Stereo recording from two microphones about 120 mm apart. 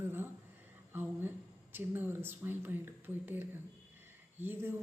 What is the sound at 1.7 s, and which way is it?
A woman's voice, 15° right (ahead or behind).